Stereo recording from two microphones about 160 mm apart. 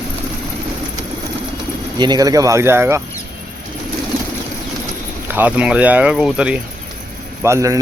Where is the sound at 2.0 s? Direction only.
25° right (ahead or behind).